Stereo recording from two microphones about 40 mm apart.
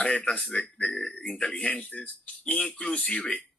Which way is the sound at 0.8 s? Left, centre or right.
Centre.